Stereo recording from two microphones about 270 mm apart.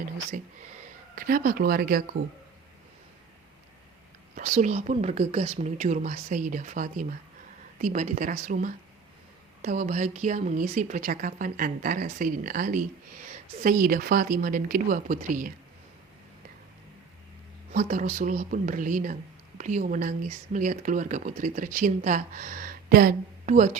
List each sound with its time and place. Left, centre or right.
1.1 s speech: right
4.4 s a woman's voice: right
17.7 s a woman's voice: right